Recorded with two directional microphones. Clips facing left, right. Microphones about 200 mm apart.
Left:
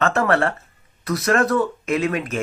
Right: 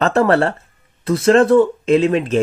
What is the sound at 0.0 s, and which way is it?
Speech, 35° right (ahead or behind).